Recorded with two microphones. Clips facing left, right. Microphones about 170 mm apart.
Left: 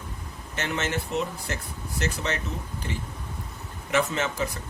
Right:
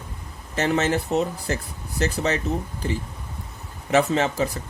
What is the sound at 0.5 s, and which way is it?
Speech, 35° right (ahead or behind).